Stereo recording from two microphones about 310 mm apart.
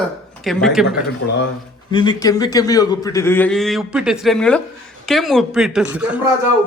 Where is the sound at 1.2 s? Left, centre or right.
Left.